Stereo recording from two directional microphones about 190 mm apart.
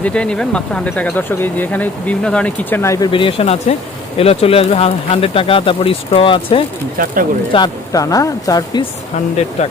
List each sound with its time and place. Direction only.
0.0 s speech: 5° left (ahead or behind)
3.1 s speech: 25° left (ahead or behind)
9.6 s speech: 35° left (ahead or behind)